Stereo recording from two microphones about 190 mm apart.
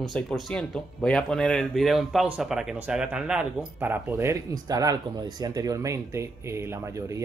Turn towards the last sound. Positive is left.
turn(degrees=-15)  # may be behind; listen again after turning